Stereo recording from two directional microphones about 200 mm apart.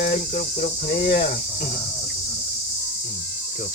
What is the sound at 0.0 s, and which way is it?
Cricket, 40° left (ahead or behind).